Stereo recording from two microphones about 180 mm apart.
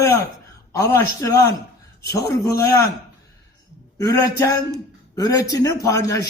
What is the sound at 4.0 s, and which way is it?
A woman's voice, 20° left (ahead or behind).